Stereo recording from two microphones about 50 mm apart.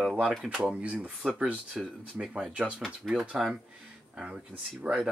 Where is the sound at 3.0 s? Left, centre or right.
Centre.